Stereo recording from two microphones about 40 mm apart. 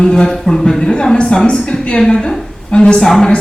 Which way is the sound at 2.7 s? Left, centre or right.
Left.